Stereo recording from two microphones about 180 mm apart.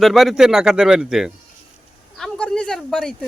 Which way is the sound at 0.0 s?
Centre (ahead or behind).